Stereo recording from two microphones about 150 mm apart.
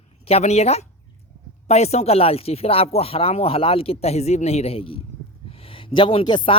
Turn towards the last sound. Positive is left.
turn(degrees=35)  # may be behind; listen again after turning